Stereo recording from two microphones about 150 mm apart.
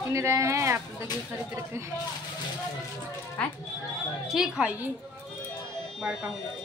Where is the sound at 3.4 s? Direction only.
5° left (ahead or behind).